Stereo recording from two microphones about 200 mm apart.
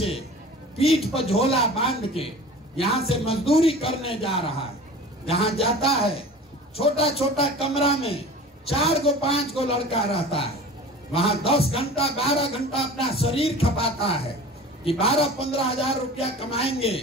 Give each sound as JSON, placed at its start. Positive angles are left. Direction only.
{"t": 1.0, "sound": "a man's voice", "side_deg": 30}